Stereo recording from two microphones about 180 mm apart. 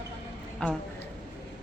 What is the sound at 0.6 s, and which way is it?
Speech, 5° left (ahead or behind).